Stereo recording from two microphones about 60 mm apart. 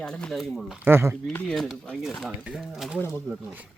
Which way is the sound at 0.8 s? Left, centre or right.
Right.